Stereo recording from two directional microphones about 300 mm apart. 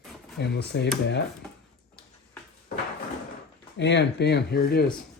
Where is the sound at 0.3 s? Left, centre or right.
Left.